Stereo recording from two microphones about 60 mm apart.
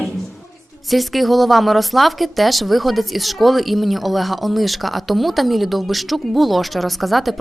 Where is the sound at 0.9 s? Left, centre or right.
Centre.